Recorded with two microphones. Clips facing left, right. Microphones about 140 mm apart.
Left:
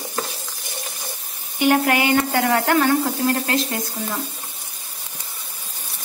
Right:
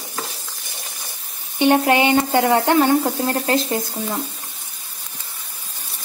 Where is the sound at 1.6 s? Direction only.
25° right (ahead or behind).